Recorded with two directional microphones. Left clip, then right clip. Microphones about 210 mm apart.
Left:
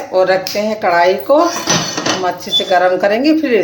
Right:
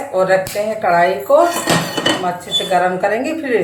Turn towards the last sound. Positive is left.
turn(degrees=45)  # may be behind; listen again after turning